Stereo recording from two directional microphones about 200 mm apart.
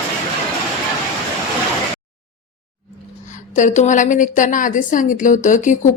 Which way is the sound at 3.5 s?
35° left (ahead or behind).